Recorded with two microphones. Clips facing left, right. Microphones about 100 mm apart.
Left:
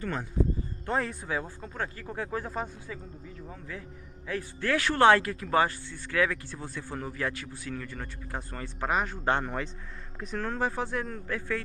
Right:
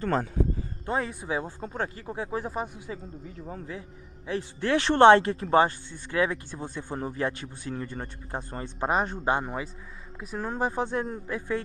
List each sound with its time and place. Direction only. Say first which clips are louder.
0.8 s speech: right 1 dB; 10° right (ahead or behind)
1.3 s speech: right 3 dB; 25° right (ahead or behind)
2.0 s speech: right 2 dB; 15° right (ahead or behind)
3.4 s speech: right 4 dB; 30° right (ahead or behind)
9.2 s speech: right 1 dB; 15° right (ahead or behind)
10.5 s speech: right 4 dB; 20° right (ahead or behind)